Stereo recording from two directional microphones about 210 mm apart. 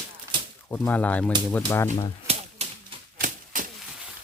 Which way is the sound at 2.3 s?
30° right (ahead or behind).